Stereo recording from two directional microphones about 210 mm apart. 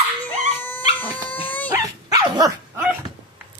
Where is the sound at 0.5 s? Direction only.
10° left (ahead or behind).